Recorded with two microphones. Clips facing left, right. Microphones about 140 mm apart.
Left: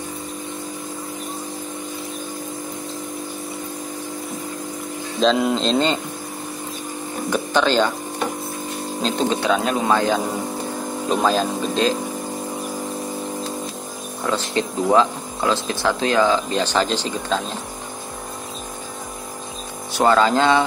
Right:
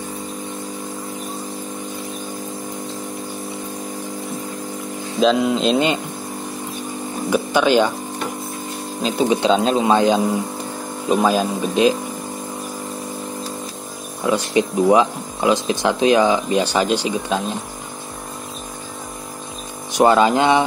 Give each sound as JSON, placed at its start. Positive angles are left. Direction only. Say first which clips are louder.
{"t": 5.2, "sound": "speech", "louder": "right 2 dB", "side_deg": -5}
{"t": 7.2, "sound": "a sound", "louder": "right 3 dB", "side_deg": -10}
{"t": 9.0, "sound": "speech", "louder": "right 3 dB", "side_deg": -10}
{"t": 9.4, "sound": "a man's voice", "louder": "right 4 dB", "side_deg": -25}
{"t": 14.2, "sound": "speech", "louder": "right 4 dB", "side_deg": -15}
{"t": 19.9, "sound": "speech", "louder": "right 2 dB", "side_deg": -15}